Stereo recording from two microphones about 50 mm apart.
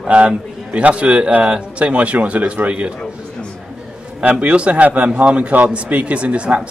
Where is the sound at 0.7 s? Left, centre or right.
Right.